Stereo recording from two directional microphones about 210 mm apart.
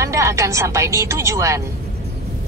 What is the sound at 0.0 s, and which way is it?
Speech, 15° right (ahead or behind).